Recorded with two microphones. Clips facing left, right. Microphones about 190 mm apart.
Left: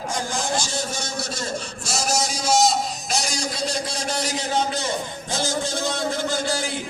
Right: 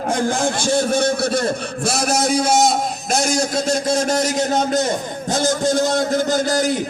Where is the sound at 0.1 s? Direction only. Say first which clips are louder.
Right 7 dB; 60° right (ahead or behind).